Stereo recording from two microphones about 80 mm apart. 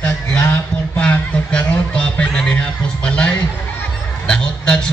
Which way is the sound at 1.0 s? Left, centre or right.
Centre.